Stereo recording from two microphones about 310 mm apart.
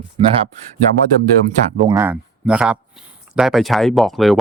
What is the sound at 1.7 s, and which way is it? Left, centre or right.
Speech, centre.